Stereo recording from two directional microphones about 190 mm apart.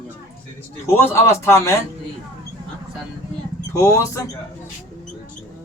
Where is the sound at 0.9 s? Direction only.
10° left (ahead or behind).